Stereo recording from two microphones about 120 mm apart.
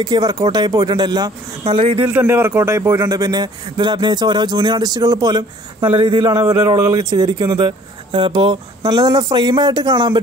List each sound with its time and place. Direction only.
0.0 s a man's voice: 30° right (ahead or behind)
1.6 s speech: 50° right (ahead or behind)
2.0 s a man's voice: 15° right (ahead or behind); by 10.1 s 40° right (ahead or behind)